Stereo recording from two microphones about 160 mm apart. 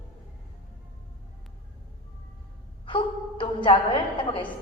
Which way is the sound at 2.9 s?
30° left (ahead or behind).